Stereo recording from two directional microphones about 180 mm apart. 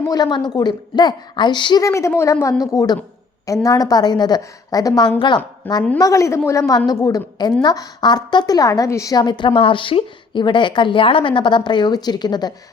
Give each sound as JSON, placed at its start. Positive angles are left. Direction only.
{"t": 0.1, "sound": "a woman's voice", "side_deg": 25}